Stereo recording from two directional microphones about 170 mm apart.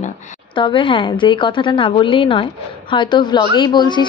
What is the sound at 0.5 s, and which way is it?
Speech, 30° left (ahead or behind).